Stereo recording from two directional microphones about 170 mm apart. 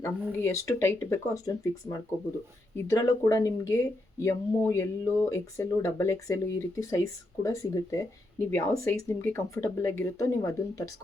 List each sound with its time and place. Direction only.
0.0 s speech: 15° left (ahead or behind)